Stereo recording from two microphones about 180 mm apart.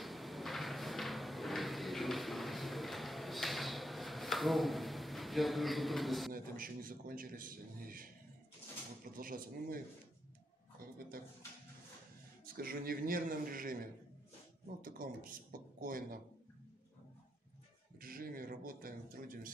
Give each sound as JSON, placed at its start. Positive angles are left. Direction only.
{"t": 0.0, "sound": "drawer open or close", "side_deg": 0}
{"t": 6.3, "sound": "a man's voice", "side_deg": -50}
{"t": 9.1, "sound": "a man's voice", "side_deg": -50}
{"t": 12.5, "sound": "a man's voice", "side_deg": -55}
{"t": 14.8, "sound": "a man's voice", "side_deg": -50}
{"t": 18.0, "sound": "a man's voice", "side_deg": -55}